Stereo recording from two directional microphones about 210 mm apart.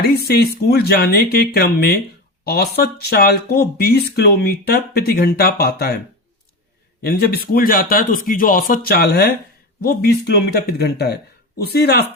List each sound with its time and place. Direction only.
0.0 s speech: 45° left (ahead or behind)
7.0 s speech: 45° left (ahead or behind)